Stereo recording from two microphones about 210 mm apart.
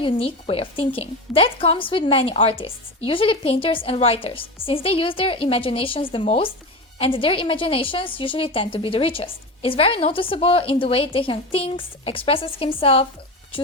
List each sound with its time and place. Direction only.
0.0 s a woman's voice: 25° left (ahead or behind)